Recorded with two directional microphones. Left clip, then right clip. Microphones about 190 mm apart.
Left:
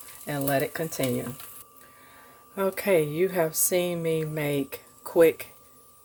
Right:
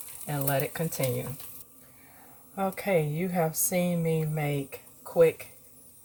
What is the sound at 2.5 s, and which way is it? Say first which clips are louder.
A woman's voice: left 4 dB; 55° left (ahead or behind).